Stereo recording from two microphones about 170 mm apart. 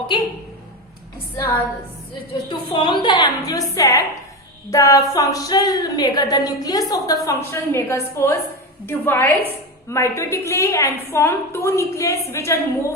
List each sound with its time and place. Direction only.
0.1 s a woman's voice: 30° left (ahead or behind)
2.5 s a woman's voice: 25° left (ahead or behind)